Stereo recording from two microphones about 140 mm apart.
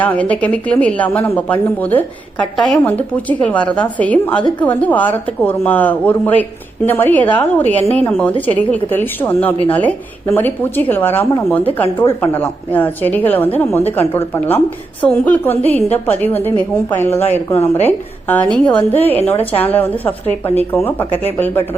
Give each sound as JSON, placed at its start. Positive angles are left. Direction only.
{"t": 0.0, "sound": "a woman's voice", "side_deg": 10}
{"t": 17.5, "sound": "a woman's voice", "side_deg": 50}
{"t": 17.8, "sound": "a woman's voice", "side_deg": 15}